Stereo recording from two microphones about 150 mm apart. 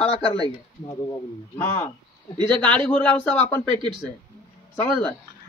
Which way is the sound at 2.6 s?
10° left (ahead or behind).